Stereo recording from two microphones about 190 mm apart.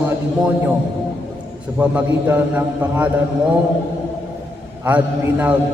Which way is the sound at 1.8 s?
10° right (ahead or behind).